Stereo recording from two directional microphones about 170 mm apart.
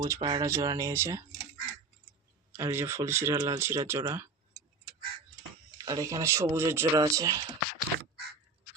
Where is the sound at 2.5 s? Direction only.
15° right (ahead or behind).